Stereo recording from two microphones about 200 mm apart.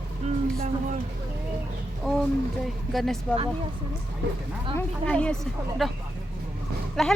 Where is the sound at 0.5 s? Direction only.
45° right (ahead or behind).